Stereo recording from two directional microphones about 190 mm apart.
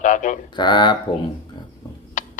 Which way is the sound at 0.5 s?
25° left (ahead or behind).